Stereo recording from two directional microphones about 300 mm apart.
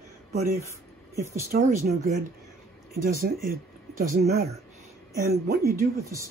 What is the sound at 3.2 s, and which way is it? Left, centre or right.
Speech, right.